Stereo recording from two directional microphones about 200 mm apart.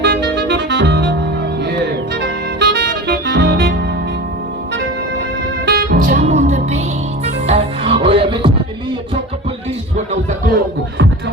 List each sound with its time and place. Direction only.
0.0 s music: 65° right (ahead or behind)
5.6 s music: 50° right (ahead or behind); by 8.5 s 25° right (ahead or behind)